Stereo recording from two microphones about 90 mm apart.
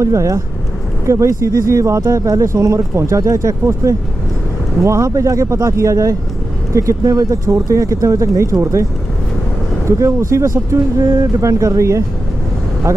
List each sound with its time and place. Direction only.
0.0 s speech: 35° right (ahead or behind)
9.8 s speech: 35° right (ahead or behind)